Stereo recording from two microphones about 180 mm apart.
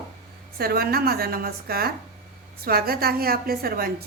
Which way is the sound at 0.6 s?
60° right (ahead or behind).